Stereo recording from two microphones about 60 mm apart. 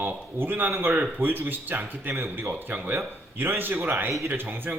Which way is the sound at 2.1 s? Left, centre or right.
Right.